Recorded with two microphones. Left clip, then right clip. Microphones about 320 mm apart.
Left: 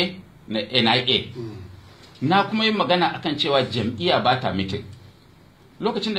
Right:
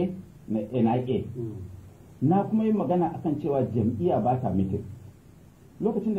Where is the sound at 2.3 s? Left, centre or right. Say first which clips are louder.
Left 6 dB; left.